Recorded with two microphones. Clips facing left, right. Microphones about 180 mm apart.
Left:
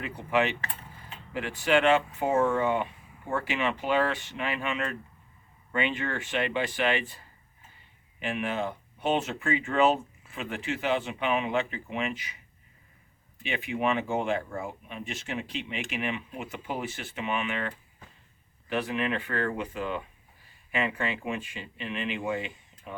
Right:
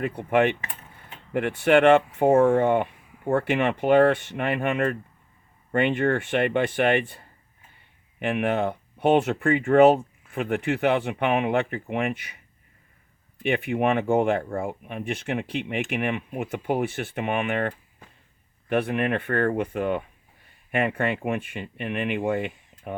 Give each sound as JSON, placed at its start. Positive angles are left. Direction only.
{"t": 0.0, "sound": "keys jangling", "side_deg": -50}
{"t": 1.3, "sound": "speech", "side_deg": -60}
{"t": 13.4, "sound": "speech", "side_deg": -55}